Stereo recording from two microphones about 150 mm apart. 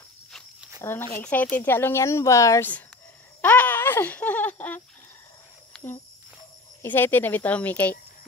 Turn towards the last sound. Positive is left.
turn(degrees=10)  # may be behind; listen again after turning